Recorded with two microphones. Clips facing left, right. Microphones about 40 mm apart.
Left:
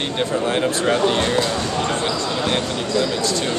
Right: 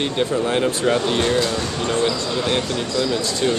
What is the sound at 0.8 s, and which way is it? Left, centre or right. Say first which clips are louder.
Speech: left 3 dB; centre.